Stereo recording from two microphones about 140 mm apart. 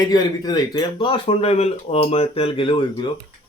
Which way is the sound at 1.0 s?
35° left (ahead or behind).